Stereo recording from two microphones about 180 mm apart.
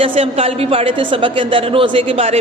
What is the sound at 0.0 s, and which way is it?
A woman's voice, 30° right (ahead or behind).